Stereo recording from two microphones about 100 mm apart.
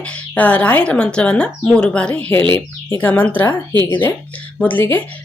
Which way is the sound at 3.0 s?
15° left (ahead or behind).